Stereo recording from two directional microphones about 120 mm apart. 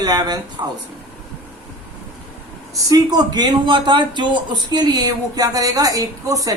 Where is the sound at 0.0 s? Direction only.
35° right (ahead or behind).